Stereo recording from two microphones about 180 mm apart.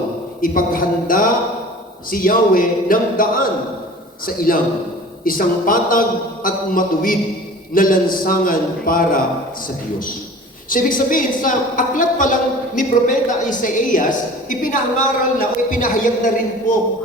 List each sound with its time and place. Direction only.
0.4 s a woman's voice: 50° left (ahead or behind)
10.7 s a woman's voice: 50° left (ahead or behind)